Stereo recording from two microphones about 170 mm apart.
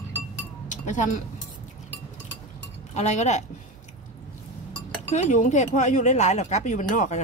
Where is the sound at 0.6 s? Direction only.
45° left (ahead or behind).